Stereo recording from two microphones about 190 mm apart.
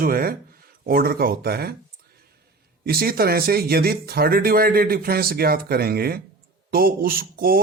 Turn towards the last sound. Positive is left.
turn(degrees=-50)  # may be behind; listen again after turning